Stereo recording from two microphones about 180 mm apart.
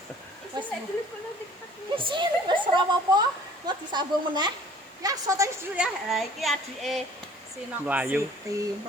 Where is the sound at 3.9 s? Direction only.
25° right (ahead or behind).